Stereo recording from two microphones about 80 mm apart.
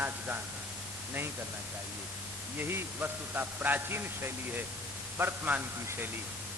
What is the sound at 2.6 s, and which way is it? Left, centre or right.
Mantra, right.